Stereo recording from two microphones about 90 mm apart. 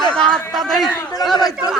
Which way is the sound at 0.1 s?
10° left (ahead or behind).